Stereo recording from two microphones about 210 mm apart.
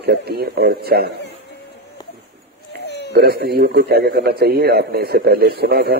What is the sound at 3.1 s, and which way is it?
Speech, 50° right (ahead or behind).